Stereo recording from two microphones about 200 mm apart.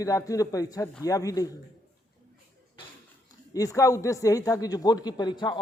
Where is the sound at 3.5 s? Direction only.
15° left (ahead or behind).